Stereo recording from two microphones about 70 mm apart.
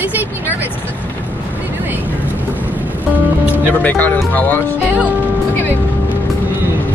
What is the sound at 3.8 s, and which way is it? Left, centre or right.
Speech, left.